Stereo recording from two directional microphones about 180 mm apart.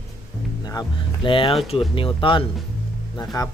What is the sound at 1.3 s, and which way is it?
Speech, 30° left (ahead or behind).